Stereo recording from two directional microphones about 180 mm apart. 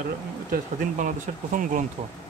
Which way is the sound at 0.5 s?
45° right (ahead or behind).